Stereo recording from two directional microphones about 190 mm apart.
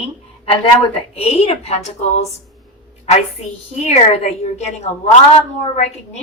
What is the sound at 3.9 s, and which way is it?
A woman's voice, 35° left (ahead or behind).